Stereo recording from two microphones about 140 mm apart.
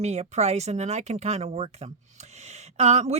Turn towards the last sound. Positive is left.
turn(degrees=-50)  # may be behind; listen again after turning